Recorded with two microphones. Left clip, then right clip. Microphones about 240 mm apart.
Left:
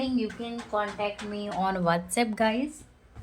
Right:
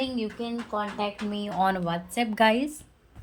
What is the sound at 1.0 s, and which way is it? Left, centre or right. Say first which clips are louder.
Speech: right 1 dB; right.